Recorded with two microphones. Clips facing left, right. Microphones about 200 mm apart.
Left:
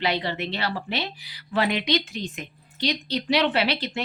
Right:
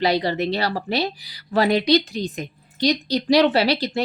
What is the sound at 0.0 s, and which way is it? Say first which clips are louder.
A woman's voice: right 6 dB; 40° right (ahead or behind).